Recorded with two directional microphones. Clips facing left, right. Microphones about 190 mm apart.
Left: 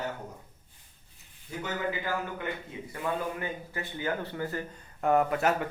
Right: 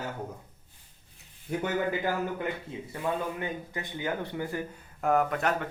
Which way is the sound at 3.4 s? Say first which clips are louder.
Right 1 dB; 15° right (ahead or behind).